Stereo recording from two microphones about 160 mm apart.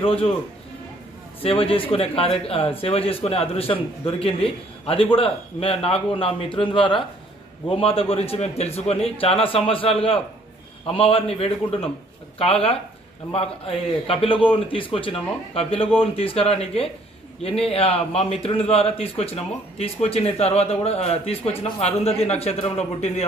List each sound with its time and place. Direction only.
0.0 s a man's voice: 35° left (ahead or behind)
1.4 s a man's voice: 35° left (ahead or behind)